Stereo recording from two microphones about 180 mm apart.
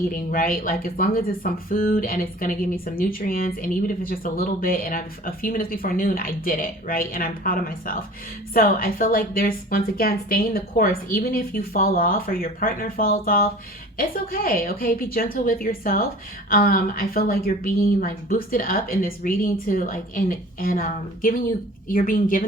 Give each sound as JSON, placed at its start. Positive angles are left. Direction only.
{"t": 0.1, "sound": "speech", "side_deg": 50}